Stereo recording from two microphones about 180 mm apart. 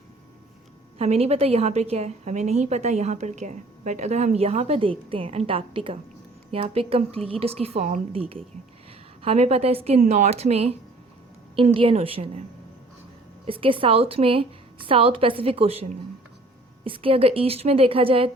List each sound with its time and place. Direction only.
0.9 s a woman's voice: 35° right (ahead or behind)
13.5 s a woman's voice: 30° right (ahead or behind)